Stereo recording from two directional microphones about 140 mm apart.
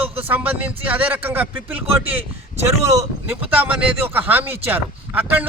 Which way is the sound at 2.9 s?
25° right (ahead or behind).